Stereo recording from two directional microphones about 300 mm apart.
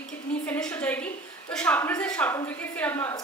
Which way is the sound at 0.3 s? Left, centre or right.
Centre.